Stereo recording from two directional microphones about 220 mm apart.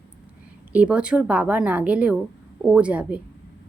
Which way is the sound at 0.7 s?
5° right (ahead or behind).